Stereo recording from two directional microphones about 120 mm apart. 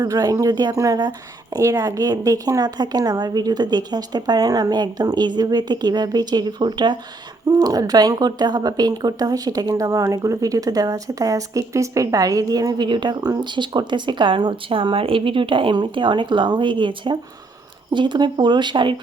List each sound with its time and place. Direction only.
0.0 s speech: 30° right (ahead or behind)